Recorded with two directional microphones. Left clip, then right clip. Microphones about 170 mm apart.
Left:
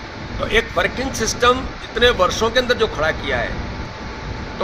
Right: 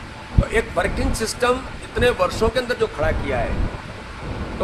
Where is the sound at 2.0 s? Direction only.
15° left (ahead or behind).